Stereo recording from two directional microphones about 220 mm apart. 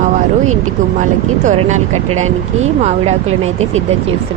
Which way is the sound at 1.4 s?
35° right (ahead or behind).